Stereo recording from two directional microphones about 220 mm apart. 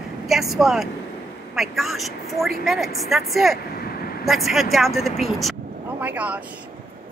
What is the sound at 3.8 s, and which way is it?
Vehicle, 45° left (ahead or behind).